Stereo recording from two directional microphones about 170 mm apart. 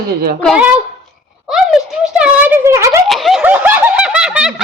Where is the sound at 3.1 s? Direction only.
Centre (ahead or behind).